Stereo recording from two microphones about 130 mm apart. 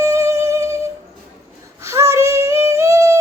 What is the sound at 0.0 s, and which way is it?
Music, 25° right (ahead or behind).